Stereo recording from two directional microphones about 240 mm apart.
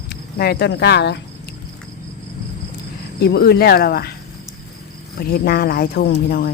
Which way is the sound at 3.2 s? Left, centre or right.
Left.